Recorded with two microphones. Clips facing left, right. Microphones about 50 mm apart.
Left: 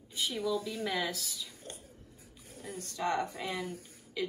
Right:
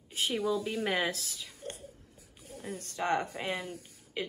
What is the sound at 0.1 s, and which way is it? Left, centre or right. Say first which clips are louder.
A woman's voice: right 2 dB; right.